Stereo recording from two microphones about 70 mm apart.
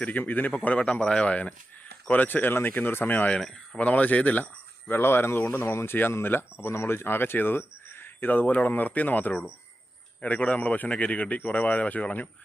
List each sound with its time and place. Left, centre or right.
0.0 s a man's voice: left
3.4 s speech: centre
3.8 s a man's voice: left
4.9 s a man's voice: left